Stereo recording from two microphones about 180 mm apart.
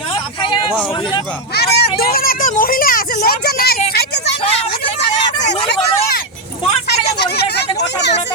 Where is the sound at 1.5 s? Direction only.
65° left (ahead or behind).